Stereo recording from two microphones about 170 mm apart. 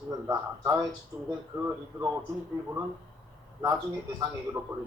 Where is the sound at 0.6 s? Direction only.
15° right (ahead or behind).